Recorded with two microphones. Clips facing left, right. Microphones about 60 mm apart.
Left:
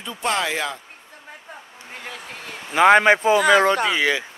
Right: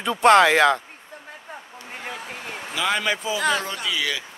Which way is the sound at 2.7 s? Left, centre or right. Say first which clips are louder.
Left 11 dB; left.